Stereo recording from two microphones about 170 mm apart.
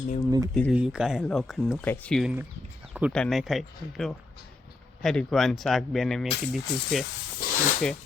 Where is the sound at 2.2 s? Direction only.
10° right (ahead or behind).